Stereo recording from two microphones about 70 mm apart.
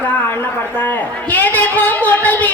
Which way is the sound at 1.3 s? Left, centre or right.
Left.